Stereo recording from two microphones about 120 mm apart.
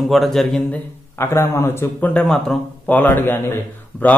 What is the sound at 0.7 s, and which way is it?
Speech, 20° left (ahead or behind).